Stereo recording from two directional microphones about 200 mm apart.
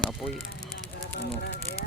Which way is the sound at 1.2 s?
55° left (ahead or behind).